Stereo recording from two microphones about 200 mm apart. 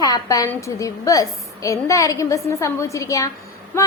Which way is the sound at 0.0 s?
20° left (ahead or behind).